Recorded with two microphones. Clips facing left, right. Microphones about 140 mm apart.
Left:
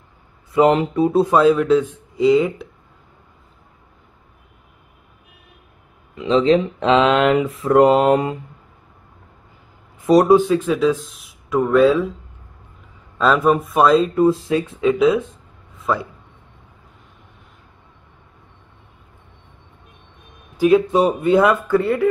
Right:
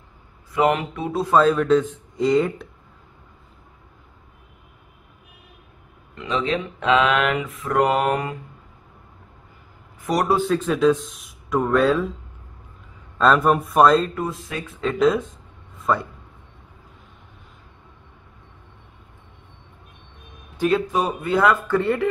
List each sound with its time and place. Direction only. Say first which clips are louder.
0.5 s speech: left 5 dB; 30° left (ahead or behind)
1.3 s speech: right 1 dB; 5° left (ahead or behind)
6.2 s speech: left 9 dB; 30° left (ahead or behind)
10.0 s speech: left 9 dB; 25° left (ahead or behind)
10.4 s speech: left 1 dB; 5° left (ahead or behind)
13.2 s speech: left 1 dB; centre (ahead or behind)
14.1 s speech: left 12 dB; 30° left (ahead or behind)
14.9 s a man's voice: left 3 dB; centre (ahead or behind)
20.5 s a man's voice: left 7 dB; 10° left (ahead or behind)
20.8 s speech: left 7 dB; 25° left (ahead or behind)
21.6 s speech: left 4 dB; 5° left (ahead or behind)